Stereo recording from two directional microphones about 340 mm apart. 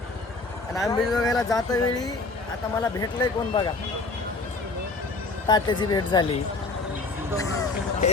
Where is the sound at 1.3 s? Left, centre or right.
Centre.